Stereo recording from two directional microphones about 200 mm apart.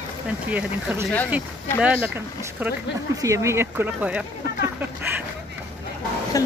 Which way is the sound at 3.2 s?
15° right (ahead or behind).